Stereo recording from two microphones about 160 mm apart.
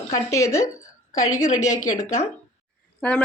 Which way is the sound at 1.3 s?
45° left (ahead or behind).